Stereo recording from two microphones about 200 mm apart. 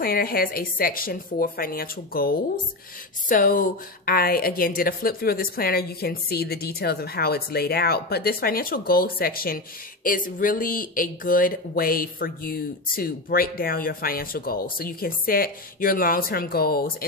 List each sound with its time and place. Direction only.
0.0 s speech: 50° left (ahead or behind)